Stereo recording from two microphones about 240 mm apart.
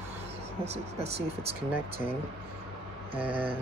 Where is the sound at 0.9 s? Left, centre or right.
Right.